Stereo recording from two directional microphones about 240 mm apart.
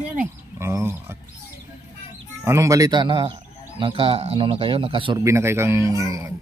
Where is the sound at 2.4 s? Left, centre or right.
Centre.